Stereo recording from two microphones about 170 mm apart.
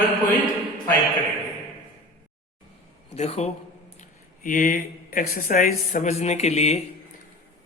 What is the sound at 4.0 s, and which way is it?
Speech, 50° left (ahead or behind).